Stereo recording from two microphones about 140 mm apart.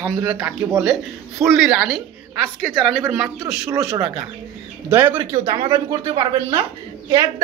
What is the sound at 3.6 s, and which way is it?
A woman's voice, 20° right (ahead or behind).